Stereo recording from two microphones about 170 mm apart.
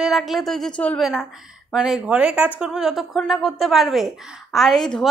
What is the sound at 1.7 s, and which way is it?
A woman's voice, 5° right (ahead or behind).